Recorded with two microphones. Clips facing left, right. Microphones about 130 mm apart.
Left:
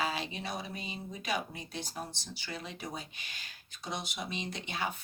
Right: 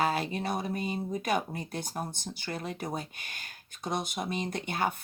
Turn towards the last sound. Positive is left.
turn(degrees=-50)  # may be behind; listen again after turning